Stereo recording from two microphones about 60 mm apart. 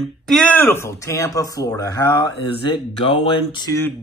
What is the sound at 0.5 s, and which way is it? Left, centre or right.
Speech, left.